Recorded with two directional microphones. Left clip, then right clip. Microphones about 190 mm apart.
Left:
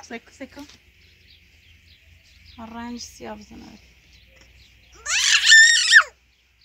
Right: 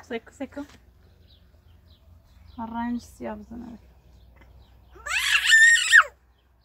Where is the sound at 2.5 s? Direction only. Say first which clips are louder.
Right 4 dB; 40° left (ahead or behind).